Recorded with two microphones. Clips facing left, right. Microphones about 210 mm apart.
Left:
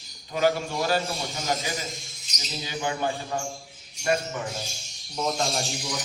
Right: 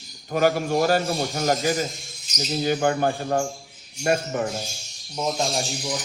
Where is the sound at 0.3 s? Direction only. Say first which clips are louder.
Right 4 dB; 50° right (ahead or behind).